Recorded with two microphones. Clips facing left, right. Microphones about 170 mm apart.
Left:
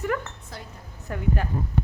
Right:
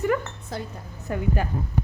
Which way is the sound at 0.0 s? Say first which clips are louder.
Right 4 dB; 5° right (ahead or behind).